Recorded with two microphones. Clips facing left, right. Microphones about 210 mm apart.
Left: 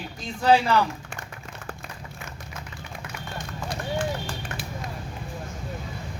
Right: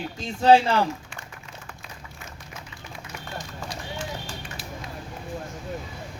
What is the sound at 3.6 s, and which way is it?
Run, 55° left (ahead or behind).